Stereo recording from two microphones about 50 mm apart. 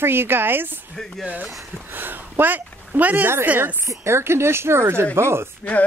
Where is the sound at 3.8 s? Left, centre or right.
Right.